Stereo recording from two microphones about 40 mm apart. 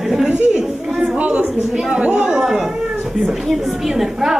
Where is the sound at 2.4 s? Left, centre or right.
Centre.